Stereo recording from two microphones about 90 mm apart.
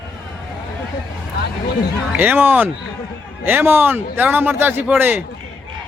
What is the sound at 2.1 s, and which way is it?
A man's voice, 20° right (ahead or behind).